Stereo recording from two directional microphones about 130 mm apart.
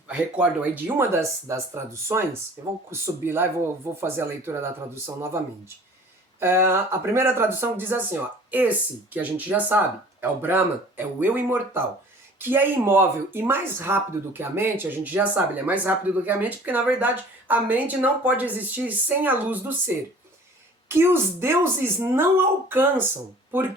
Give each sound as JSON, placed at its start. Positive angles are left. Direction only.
{"t": 0.1, "sound": "speech", "side_deg": -10}
{"t": 6.4, "sound": "speech", "side_deg": -20}
{"t": 20.9, "sound": "speech", "side_deg": -20}